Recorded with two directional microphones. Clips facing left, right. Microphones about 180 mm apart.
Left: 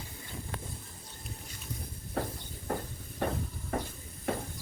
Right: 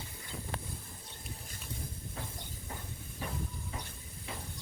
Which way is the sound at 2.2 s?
70° left (ahead or behind).